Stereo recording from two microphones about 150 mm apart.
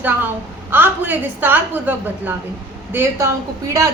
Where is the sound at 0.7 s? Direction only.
15° right (ahead or behind).